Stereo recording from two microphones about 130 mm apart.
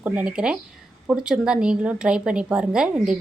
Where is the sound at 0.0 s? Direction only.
10° right (ahead or behind).